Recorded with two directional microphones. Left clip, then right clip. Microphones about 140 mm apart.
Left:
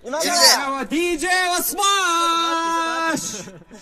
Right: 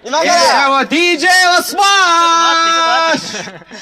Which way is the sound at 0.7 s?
50° right (ahead or behind).